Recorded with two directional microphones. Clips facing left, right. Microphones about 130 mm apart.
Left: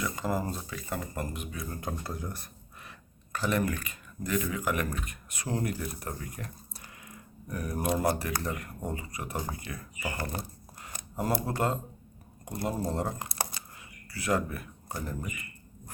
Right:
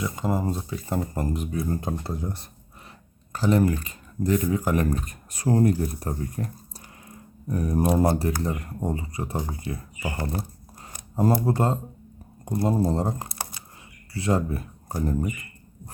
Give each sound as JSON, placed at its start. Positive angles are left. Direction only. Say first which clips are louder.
{"t": 0.0, "sound": "speech", "louder": "right 4 dB", "side_deg": -25}
{"t": 11.2, "sound": "speech", "louder": "right 7 dB", "side_deg": -30}